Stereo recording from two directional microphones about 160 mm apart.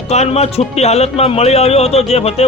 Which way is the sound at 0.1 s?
45° left (ahead or behind).